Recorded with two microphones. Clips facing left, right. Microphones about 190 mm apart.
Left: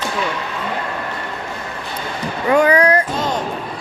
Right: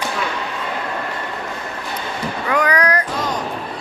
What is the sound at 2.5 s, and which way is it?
Speech, 25° left (ahead or behind).